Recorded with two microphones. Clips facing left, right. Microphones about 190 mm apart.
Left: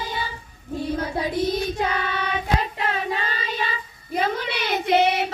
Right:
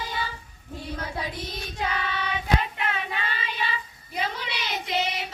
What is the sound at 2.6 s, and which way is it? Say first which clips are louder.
Child singing: left 4 dB; 35° left (ahead or behind).